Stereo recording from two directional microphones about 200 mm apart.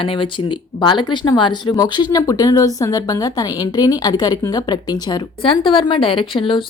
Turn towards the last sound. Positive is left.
turn(degrees=25)  # may be behind; listen again after turning